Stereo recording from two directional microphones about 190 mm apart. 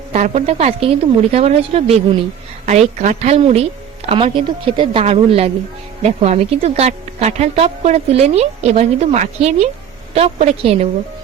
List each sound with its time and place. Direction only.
0.1 s speech: 35° right (ahead or behind)